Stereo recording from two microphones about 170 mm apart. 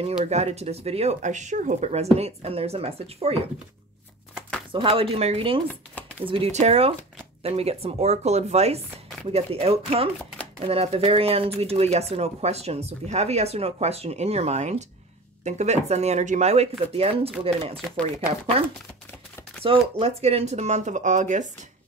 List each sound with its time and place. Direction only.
0.2 s speech: 40° right (ahead or behind)
4.7 s speech: 30° right (ahead or behind)
19.6 s speech: 35° right (ahead or behind)